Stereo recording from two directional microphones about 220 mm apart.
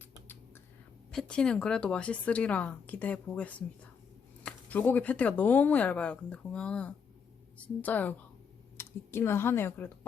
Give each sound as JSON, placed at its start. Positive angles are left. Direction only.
{"t": 1.1, "sound": "a woman's voice", "side_deg": 5}